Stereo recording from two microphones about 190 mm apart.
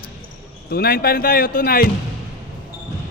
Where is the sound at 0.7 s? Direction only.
55° left (ahead or behind).